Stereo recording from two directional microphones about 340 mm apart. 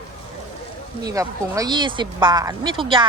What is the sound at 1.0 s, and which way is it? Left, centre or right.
Speech, centre.